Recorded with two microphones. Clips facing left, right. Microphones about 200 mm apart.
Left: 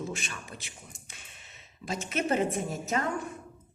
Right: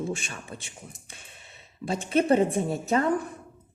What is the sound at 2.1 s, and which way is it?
Speech, 30° right (ahead or behind).